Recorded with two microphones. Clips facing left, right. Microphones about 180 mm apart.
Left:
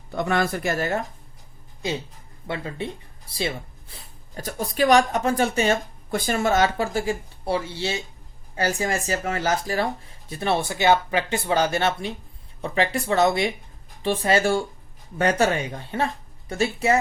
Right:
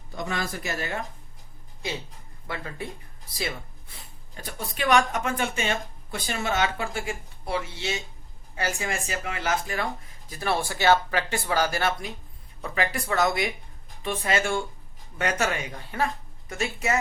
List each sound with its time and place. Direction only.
0.1 s speech: 60° left (ahead or behind)
2.5 s speech: 25° left (ahead or behind)